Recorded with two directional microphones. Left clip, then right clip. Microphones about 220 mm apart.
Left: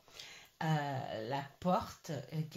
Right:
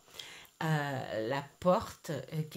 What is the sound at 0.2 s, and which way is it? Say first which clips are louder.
Speech: right 3 dB; 45° right (ahead or behind).